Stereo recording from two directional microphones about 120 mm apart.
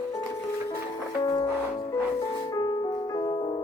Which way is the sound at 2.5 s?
35° left (ahead or behind).